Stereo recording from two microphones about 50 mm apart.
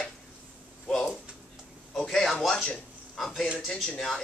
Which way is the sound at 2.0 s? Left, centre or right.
Centre.